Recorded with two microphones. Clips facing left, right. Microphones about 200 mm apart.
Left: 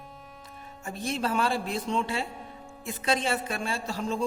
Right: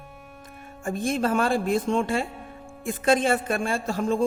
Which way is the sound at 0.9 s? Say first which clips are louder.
Right 6 dB; 50° right (ahead or behind).